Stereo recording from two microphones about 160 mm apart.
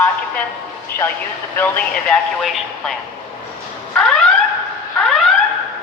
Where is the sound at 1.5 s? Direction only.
10° left (ahead or behind).